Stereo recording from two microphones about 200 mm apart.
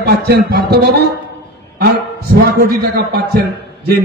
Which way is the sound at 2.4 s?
50° right (ahead or behind).